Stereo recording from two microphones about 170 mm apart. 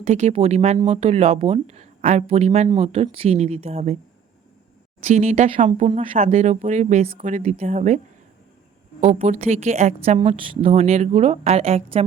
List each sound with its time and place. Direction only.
0.0 s a woman's voice: 40° right (ahead or behind)
5.0 s a woman's voice: 40° right (ahead or behind)
6.1 s a woman's voice: 45° right (ahead or behind)
10.2 s a woman's voice: 30° right (ahead or behind)